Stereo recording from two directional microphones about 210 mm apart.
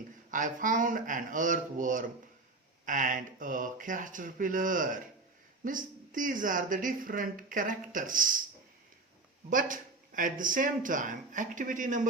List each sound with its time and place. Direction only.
0.3 s speech: 40° right (ahead or behind)
9.5 s speech: 40° right (ahead or behind)